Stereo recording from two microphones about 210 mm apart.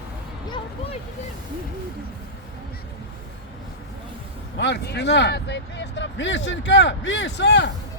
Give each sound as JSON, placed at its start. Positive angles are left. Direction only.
{"t": 4.5, "sound": "speech", "side_deg": 55}